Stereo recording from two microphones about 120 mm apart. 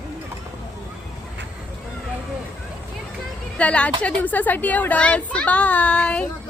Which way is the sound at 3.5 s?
10° left (ahead or behind).